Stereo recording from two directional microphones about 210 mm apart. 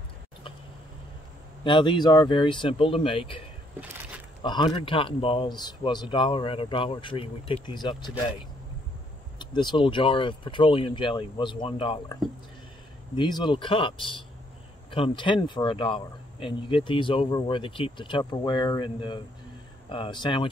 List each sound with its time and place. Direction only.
1.6 s speech: 20° left (ahead or behind)
9.4 s speech: 20° left (ahead or behind)